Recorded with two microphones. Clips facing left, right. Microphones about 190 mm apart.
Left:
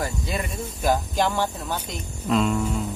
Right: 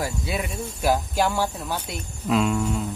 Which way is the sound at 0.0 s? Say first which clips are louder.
Right 1 dB; 5° right (ahead or behind).